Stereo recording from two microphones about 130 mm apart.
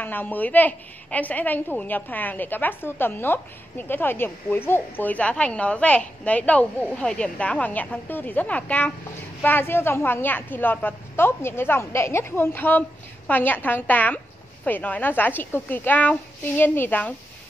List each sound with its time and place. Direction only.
0.0 s a woman's voice: 15° left (ahead or behind)